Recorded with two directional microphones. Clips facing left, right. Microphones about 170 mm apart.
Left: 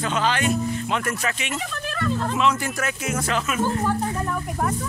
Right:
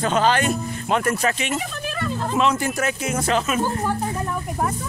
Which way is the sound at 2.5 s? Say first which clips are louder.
Right 4 dB; 25° right (ahead or behind).